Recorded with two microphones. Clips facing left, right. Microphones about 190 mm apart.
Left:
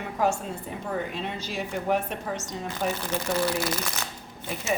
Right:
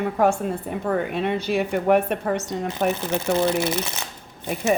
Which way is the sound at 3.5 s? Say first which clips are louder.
Right 6 dB; 25° right (ahead or behind).